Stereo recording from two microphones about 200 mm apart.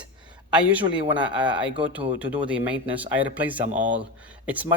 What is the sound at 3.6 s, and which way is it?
Speech, 40° right (ahead or behind).